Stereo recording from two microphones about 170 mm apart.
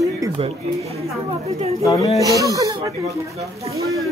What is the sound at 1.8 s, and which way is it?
Speech, 20° left (ahead or behind).